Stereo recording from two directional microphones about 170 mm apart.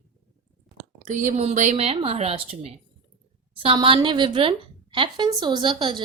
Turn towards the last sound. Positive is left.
turn(degrees=-30)  # may be behind; listen again after turning